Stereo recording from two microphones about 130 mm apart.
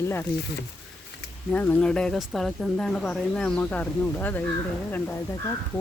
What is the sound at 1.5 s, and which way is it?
Speech, 10° left (ahead or behind).